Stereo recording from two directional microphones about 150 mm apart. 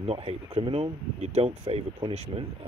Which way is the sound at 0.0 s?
45° right (ahead or behind).